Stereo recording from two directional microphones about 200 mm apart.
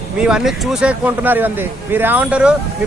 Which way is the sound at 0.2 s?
5° right (ahead or behind).